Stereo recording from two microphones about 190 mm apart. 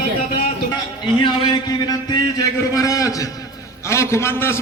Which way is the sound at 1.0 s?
25° left (ahead or behind).